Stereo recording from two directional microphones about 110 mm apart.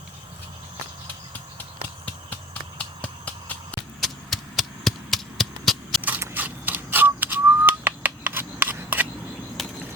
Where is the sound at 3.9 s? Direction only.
Centre (ahead or behind).